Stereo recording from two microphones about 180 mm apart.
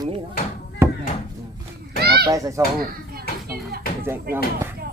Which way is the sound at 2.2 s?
20° right (ahead or behind).